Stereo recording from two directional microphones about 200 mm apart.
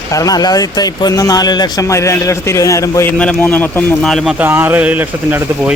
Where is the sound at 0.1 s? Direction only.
15° left (ahead or behind).